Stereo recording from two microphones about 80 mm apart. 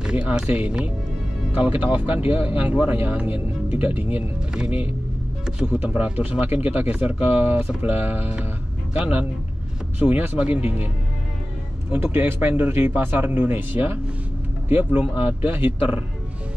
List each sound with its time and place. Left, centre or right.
0.0 s speech: centre
11.9 s speech: right